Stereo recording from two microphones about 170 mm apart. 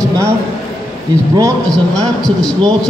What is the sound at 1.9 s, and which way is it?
Speech, 5° left (ahead or behind).